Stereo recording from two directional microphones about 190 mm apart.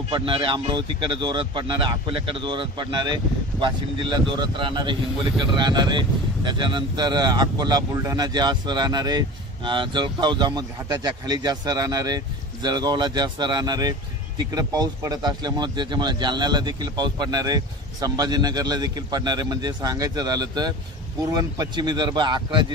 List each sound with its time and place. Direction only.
0.1 s speech: 25° right (ahead or behind)